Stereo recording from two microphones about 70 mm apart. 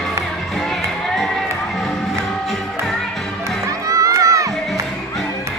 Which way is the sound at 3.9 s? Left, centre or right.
Right.